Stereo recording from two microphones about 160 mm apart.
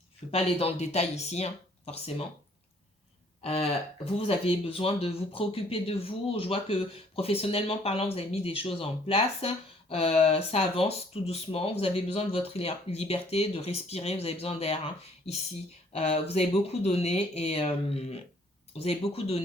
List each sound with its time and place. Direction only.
0.3 s speech: 40° left (ahead or behind)
3.4 s speech: 40° left (ahead or behind)
15.9 s speech: 40° left (ahead or behind)